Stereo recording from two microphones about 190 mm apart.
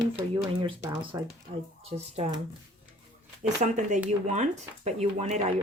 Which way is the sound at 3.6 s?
40° right (ahead or behind).